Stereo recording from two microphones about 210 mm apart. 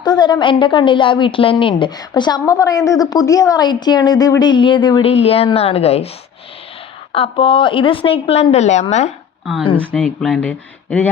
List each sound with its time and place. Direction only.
0.0 s a woman's voice: 20° left (ahead or behind)
7.1 s a woman's voice: 25° left (ahead or behind)
10.0 s speech: centre (ahead or behind)